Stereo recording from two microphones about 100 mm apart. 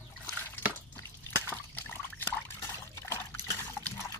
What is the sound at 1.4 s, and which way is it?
Liquid, 20° left (ahead or behind).